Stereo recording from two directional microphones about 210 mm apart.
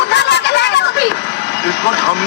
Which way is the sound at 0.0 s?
55° left (ahead or behind).